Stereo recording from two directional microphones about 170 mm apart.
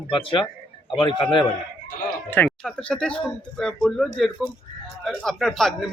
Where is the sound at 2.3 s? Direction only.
10° left (ahead or behind).